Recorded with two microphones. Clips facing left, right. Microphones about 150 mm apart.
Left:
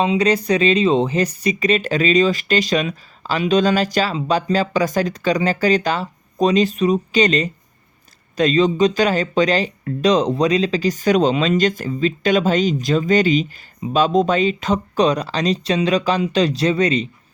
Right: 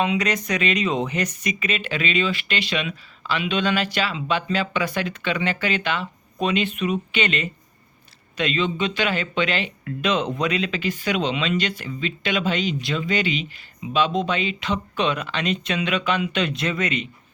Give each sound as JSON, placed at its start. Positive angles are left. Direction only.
{"t": 0.0, "sound": "speech", "side_deg": 30}